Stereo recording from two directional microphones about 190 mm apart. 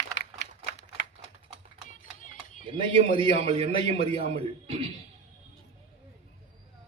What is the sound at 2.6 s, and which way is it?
A man's voice, 30° right (ahead or behind).